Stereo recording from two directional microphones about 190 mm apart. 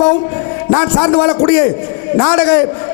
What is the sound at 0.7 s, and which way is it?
A man's voice, 25° left (ahead or behind).